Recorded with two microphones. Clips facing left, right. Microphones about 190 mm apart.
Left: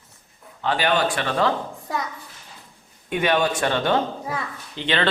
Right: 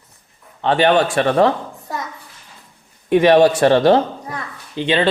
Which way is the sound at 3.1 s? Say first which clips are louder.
Right 10 dB; 35° right (ahead or behind).